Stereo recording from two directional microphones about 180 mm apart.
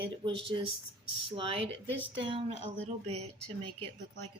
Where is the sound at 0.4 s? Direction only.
30° right (ahead or behind).